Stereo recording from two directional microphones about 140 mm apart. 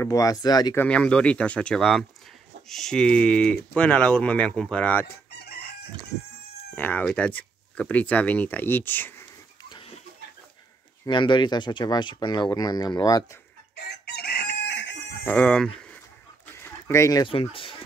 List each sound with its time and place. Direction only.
0.0 s speech: 25° left (ahead or behind)
0.7 s speech: 10° left (ahead or behind)
6.7 s speech: 10° left (ahead or behind)
11.1 s speech: 35° left (ahead or behind)
15.2 s speech: 10° left (ahead or behind)
16.5 s chicken: 20° left (ahead or behind)
17.3 s speech: 40° left (ahead or behind)